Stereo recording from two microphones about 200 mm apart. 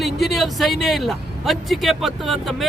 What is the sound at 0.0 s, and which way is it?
Speech, centre (ahead or behind).